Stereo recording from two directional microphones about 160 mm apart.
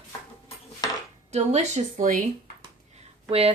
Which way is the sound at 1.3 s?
45° right (ahead or behind).